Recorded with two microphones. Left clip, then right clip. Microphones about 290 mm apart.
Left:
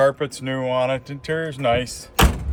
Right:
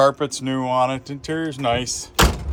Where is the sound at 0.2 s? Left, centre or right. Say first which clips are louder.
Right 1 dB; centre.